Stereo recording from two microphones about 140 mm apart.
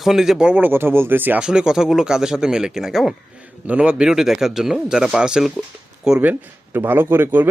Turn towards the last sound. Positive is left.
turn(degrees=-15)  # may be behind; listen again after turning